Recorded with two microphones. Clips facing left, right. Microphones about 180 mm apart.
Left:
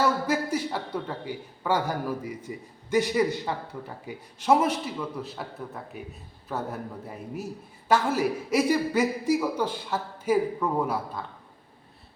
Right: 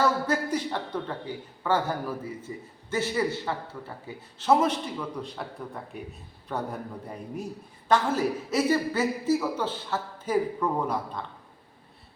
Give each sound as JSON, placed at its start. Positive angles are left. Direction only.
{"t": 0.0, "sound": "a sound", "side_deg": 10}
{"t": 1.6, "sound": "a man's voice", "side_deg": 10}
{"t": 7.9, "sound": "a man's voice", "side_deg": 10}